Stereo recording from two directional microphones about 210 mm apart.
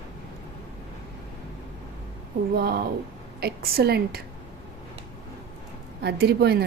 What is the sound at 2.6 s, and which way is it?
A woman's voice, 45° right (ahead or behind).